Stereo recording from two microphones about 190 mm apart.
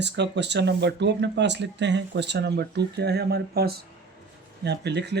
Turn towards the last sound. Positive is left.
turn(degrees=-65)  # may be behind; listen again after turning